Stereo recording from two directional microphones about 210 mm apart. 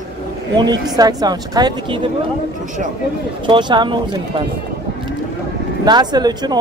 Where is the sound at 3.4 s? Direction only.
20° right (ahead or behind).